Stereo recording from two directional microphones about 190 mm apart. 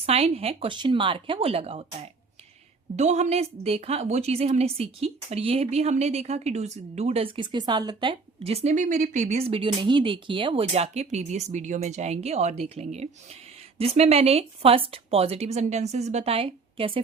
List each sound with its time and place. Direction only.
0.0 s speech: 30° right (ahead or behind)
2.9 s a woman's voice: 35° right (ahead or behind)